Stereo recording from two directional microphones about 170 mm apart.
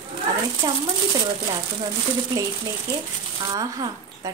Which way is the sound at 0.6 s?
20° right (ahead or behind).